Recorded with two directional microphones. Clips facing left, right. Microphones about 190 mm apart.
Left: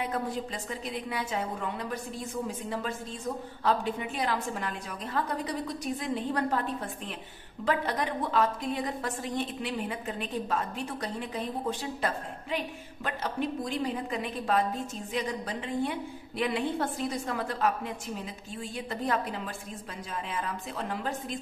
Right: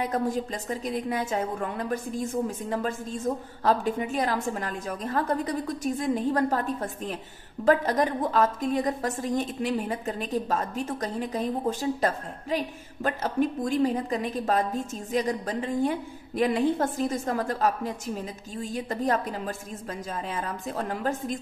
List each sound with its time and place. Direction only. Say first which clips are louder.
0.0 s a woman's voice: right 5 dB; 45° right (ahead or behind)